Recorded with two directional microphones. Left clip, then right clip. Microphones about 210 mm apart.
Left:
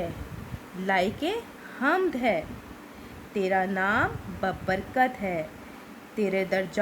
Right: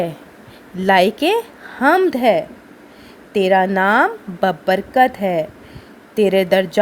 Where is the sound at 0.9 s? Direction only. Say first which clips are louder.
Right 13 dB; 35° right (ahead or behind).